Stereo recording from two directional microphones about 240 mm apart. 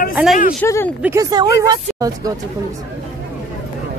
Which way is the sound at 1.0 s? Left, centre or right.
Centre.